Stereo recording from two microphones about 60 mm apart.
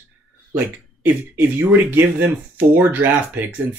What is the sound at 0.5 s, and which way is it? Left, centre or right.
Speech, right.